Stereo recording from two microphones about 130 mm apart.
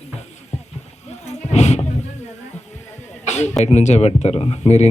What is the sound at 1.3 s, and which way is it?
Roaring cats, 60° left (ahead or behind).